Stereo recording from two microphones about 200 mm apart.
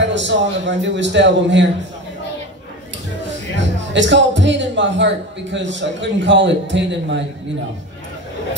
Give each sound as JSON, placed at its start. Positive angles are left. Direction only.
{"t": 0.0, "sound": "speech", "side_deg": -65}
{"t": 3.5, "sound": "speech", "side_deg": -65}